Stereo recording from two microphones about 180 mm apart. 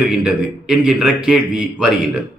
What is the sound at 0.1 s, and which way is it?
A man's voice, 5° right (ahead or behind).